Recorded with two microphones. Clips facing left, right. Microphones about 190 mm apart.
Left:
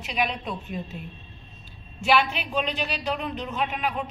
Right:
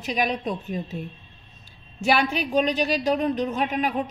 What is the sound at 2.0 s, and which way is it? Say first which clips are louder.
A woman's voice: right 1 dB; 40° right (ahead or behind).